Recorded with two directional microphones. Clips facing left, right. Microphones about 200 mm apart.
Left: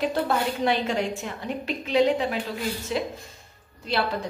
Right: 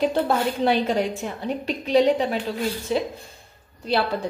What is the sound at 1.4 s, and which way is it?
Speech, 35° right (ahead or behind).